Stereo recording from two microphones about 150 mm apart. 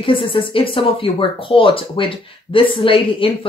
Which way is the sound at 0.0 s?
35° left (ahead or behind).